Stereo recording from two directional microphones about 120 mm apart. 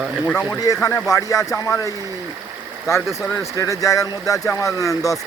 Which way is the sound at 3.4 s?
25° left (ahead or behind).